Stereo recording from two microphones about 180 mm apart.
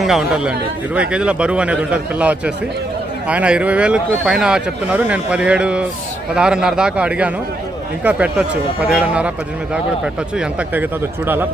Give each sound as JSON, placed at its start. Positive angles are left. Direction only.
{"t": 0.0, "sound": "a man's voice", "side_deg": 0}
{"t": 10.3, "sound": "a man's voice", "side_deg": -5}